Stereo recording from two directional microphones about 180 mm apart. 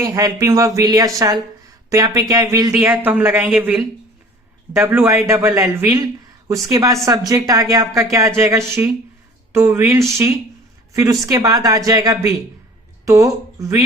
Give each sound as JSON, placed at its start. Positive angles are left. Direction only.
{"t": 0.0, "sound": "speech", "side_deg": -20}